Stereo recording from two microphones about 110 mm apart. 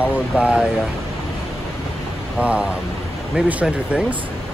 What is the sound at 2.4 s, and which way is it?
Speech, 10° right (ahead or behind).